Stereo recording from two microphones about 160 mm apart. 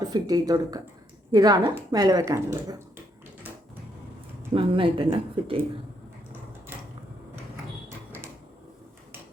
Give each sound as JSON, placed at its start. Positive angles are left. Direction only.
{"t": 0.0, "sound": "speech", "side_deg": -25}
{"t": 4.5, "sound": "speech", "side_deg": -35}
{"t": 7.9, "sound": "a sound", "side_deg": -15}